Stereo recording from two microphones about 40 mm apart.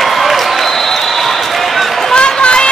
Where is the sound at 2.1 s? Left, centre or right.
Left.